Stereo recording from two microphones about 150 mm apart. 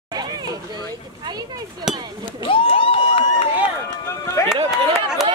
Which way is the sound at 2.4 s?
35° left (ahead or behind).